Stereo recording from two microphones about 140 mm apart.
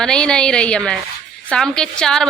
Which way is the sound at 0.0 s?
5° left (ahead or behind).